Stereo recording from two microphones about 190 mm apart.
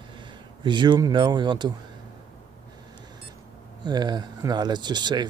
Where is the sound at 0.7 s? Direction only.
25° right (ahead or behind).